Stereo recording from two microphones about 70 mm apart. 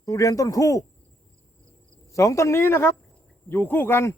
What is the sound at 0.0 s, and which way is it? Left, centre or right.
Speech, left.